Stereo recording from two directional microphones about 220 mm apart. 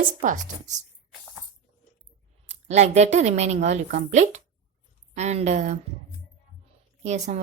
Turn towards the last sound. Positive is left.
turn(degrees=-30)  # may be behind; listen again after turning